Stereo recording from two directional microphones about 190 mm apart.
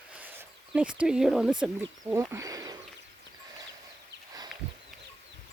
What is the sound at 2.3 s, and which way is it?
Speech, 20° right (ahead or behind).